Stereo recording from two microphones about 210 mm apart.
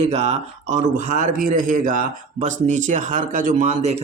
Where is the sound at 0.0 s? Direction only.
30° right (ahead or behind).